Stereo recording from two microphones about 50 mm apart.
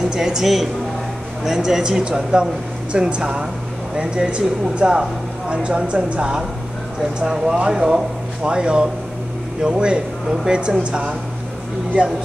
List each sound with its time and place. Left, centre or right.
0.1 s speech: centre; by 12.1 s right